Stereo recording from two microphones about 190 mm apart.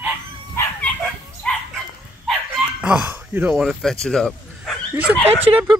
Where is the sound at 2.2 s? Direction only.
Centre (ahead or behind).